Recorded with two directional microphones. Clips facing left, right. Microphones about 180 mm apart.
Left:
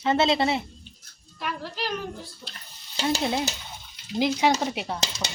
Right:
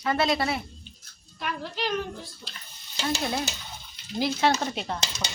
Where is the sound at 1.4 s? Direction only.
Centre (ahead or behind).